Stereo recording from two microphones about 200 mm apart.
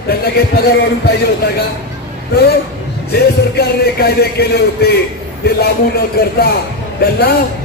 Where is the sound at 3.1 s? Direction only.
55° left (ahead or behind).